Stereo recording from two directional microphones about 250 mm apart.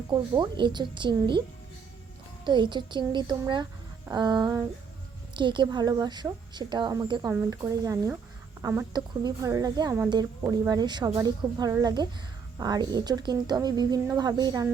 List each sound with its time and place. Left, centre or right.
0.1 s a woman's voice: centre
2.4 s a woman's voice: centre